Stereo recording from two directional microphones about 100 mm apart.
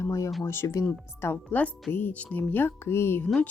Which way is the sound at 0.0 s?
30° left (ahead or behind).